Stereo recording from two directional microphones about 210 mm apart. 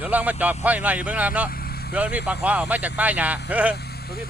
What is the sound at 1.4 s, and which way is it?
Vehicle, 45° left (ahead or behind).